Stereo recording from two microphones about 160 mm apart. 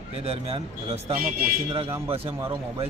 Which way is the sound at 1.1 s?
65° right (ahead or behind).